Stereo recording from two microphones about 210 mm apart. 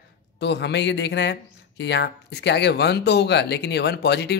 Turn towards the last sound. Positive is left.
turn(degrees=50)  # may be behind; listen again after turning